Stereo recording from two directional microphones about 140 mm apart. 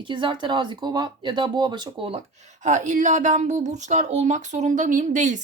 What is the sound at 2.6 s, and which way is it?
Speech, 60° right (ahead or behind).